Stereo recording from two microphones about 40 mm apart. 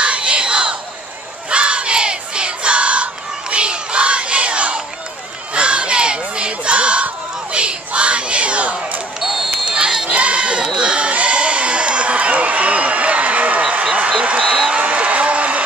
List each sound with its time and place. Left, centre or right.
0.0 s a sound: right
1.5 s battle cry: right
5.5 s crowd: right
9.2 s basketball bounce: centre
9.7 s crowd: right
14.2 s music: right
14.8 s a sound: right